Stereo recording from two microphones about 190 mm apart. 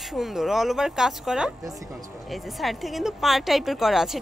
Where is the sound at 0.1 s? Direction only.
Centre (ahead or behind).